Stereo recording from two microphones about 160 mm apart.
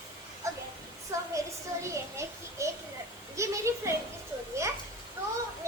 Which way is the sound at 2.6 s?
20° right (ahead or behind).